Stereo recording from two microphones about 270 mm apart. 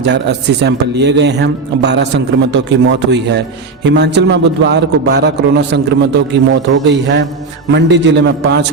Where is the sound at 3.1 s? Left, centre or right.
Right.